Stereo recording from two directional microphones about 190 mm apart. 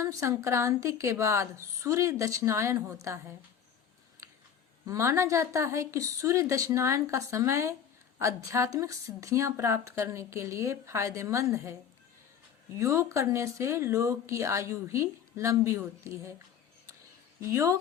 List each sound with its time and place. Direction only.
0.0 s speech: 15° right (ahead or behind)
4.9 s speech: 15° right (ahead or behind)
12.8 s speech: 15° right (ahead or behind)
17.4 s speech: 15° right (ahead or behind)